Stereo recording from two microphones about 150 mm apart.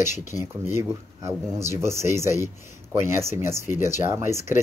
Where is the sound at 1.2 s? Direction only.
20° right (ahead or behind).